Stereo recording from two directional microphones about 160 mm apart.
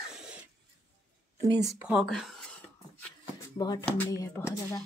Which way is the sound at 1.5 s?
25° right (ahead or behind).